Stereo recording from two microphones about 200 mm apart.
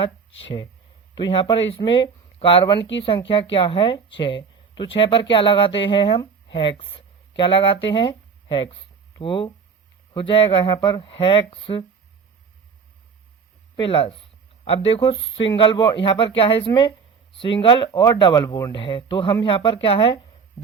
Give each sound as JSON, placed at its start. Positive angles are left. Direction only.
{"t": 1.1, "sound": "speech", "side_deg": 25}
{"t": 13.7, "sound": "a sound", "side_deg": 25}
{"t": 14.8, "sound": "speech", "side_deg": 25}